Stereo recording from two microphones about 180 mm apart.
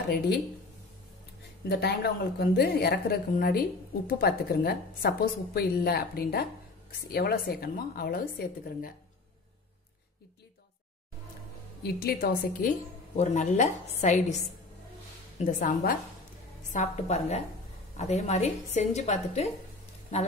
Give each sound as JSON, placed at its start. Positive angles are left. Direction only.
{"t": 1.7, "sound": "a woman's voice", "side_deg": 60}
{"t": 11.8, "sound": "a woman's voice", "side_deg": 60}
{"t": 13.1, "sound": "a woman's voice", "side_deg": 40}
{"t": 15.3, "sound": "a woman's voice", "side_deg": 45}